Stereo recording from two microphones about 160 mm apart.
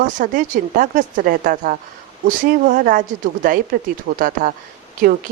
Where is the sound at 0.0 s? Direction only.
55° right (ahead or behind).